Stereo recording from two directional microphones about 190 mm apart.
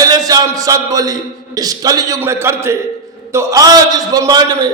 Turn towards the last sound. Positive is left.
turn(degrees=-20)  # may be behind; listen again after turning